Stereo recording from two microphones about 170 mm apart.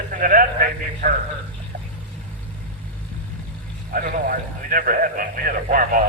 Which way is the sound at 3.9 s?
55° right (ahead or behind).